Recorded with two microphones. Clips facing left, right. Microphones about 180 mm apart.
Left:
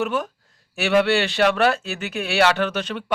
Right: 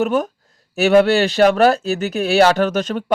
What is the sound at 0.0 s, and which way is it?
Speech, 40° right (ahead or behind).